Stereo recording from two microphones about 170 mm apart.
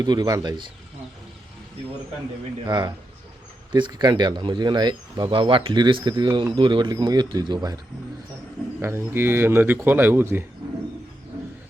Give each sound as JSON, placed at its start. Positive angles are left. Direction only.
{"t": 0.0, "sound": "speech", "side_deg": -25}
{"t": 2.6, "sound": "speech", "side_deg": -25}
{"t": 8.8, "sound": "a man's voice", "side_deg": -15}